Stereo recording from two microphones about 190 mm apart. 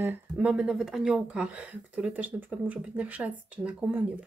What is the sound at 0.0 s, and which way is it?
Speech, 10° right (ahead or behind).